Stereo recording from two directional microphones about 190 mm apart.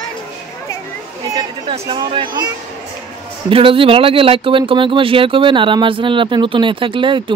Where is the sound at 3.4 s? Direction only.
30° right (ahead or behind).